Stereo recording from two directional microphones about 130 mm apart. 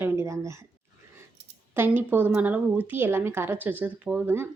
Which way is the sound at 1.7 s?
15° right (ahead or behind).